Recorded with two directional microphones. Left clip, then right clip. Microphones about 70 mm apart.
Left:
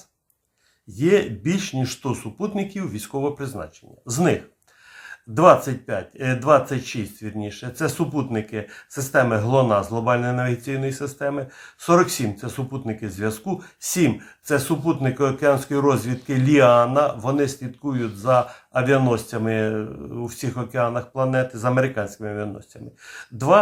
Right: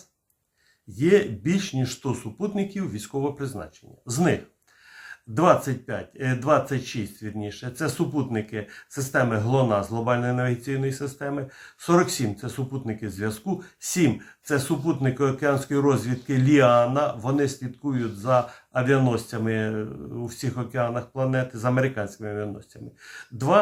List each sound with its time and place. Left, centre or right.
0.9 s speech: left
14.7 s a man's voice: centre
15.1 s speech: left